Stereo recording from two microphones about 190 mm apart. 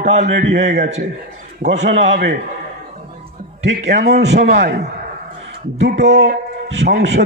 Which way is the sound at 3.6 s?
70° right (ahead or behind).